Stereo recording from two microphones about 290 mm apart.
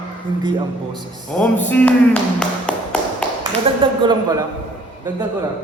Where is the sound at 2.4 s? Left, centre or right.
Centre.